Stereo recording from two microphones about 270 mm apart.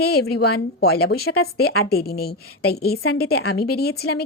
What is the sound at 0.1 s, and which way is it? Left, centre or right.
A woman's voice, left.